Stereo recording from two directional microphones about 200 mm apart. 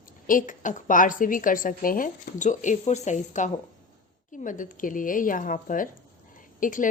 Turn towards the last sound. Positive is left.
turn(degrees=40)  # may be behind; listen again after turning